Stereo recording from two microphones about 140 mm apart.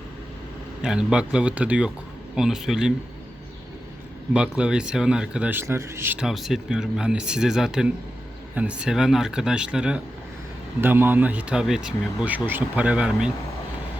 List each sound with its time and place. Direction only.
0.8 s speech: 5° right (ahead or behind)
4.4 s speech: 5° right (ahead or behind)
6.1 s speech: centre (ahead or behind)